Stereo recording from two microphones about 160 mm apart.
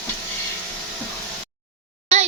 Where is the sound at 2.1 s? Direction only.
45° right (ahead or behind).